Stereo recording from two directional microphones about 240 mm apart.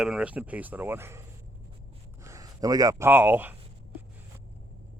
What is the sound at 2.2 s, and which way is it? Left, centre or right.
Speech, centre.